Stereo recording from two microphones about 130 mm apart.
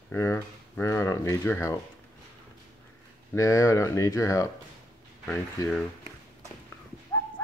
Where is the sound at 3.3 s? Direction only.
25° left (ahead or behind).